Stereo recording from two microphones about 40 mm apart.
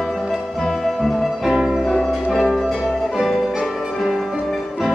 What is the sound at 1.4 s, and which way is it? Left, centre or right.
Music, centre.